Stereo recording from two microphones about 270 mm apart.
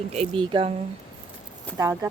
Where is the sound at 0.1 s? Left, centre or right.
Right.